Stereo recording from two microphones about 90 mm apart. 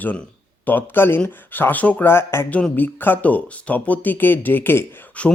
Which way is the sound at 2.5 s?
20° left (ahead or behind).